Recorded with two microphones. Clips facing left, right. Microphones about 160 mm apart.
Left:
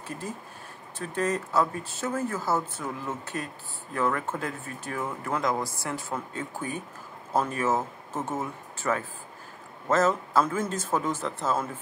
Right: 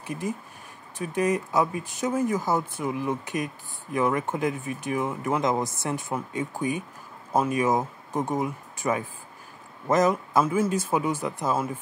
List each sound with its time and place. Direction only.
0.0 s speech: 15° right (ahead or behind)